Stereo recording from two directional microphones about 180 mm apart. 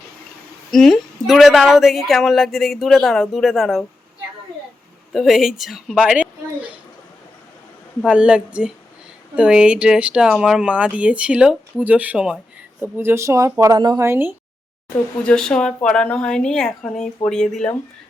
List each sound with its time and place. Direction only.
0.7 s a woman's voice: centre (ahead or behind)
5.1 s a woman's voice: centre (ahead or behind)
8.0 s a woman's voice: 5° right (ahead or behind)
15.2 s a woman's voice: 5° left (ahead or behind)